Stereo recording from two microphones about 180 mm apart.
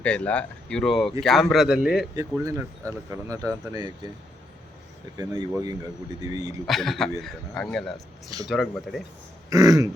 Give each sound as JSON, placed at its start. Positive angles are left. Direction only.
{"t": 0.0, "sound": "speech", "side_deg": 5}
{"t": 2.1, "sound": "speech", "side_deg": -15}
{"t": 5.1, "sound": "speech", "side_deg": -20}
{"t": 6.7, "sound": "speech", "side_deg": 0}
{"t": 9.5, "sound": "speech", "side_deg": -20}